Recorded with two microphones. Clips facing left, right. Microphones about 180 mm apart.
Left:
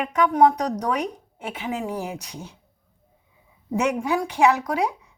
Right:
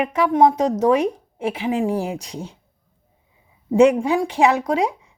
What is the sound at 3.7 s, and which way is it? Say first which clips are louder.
Speech: right 8 dB; 30° right (ahead or behind).